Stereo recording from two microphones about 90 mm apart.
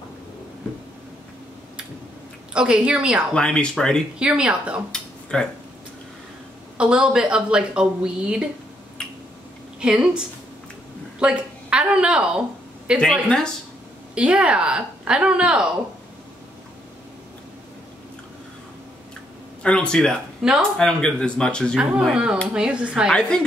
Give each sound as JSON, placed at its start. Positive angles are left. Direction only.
{"t": 2.5, "sound": "a woman's voice", "side_deg": -10}
{"t": 3.3, "sound": "speech", "side_deg": 10}
{"t": 4.2, "sound": "a woman's voice", "side_deg": -10}
{"t": 4.9, "sound": "a sound", "side_deg": 10}
{"t": 6.8, "sound": "a woman's voice", "side_deg": -10}
{"t": 9.8, "sound": "a woman's voice", "side_deg": -10}
{"t": 14.1, "sound": "a woman's voice", "side_deg": -10}
{"t": 19.6, "sound": "speech", "side_deg": 10}
{"t": 20.4, "sound": "speech", "side_deg": 0}
{"t": 20.7, "sound": "speech", "side_deg": 10}
{"t": 22.1, "sound": "a woman's voice", "side_deg": -10}
{"t": 23.1, "sound": "speech", "side_deg": 10}